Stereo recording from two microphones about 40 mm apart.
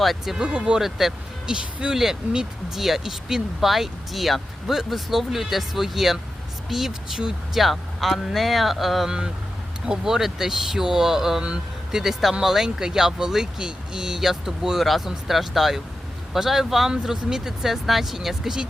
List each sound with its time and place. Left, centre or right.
0.0 s speech: centre
0.4 s speech: right
0.8 s speech: centre
1.8 s speech: right
2.7 s speech: centre
9.0 s speech: centre
14.8 s speech: centre